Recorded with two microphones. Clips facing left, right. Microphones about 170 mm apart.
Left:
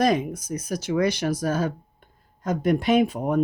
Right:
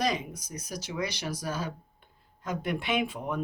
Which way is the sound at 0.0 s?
50° left (ahead or behind).